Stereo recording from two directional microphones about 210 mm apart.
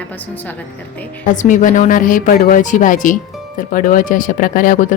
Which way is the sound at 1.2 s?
35° left (ahead or behind).